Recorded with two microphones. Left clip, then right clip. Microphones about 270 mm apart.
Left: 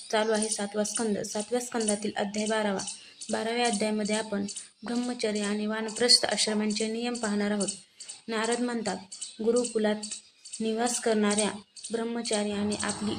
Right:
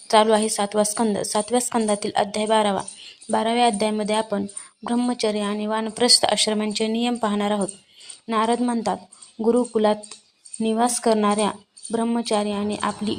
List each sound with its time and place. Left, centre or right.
0.1 s speech: right